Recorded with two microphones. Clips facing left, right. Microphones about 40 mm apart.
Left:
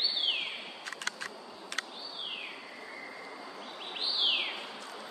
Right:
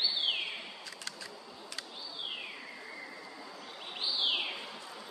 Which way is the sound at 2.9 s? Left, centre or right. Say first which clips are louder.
Left 1 dB; centre.